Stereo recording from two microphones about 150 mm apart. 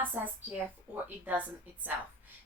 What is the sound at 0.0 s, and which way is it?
A woman's voice, 15° right (ahead or behind).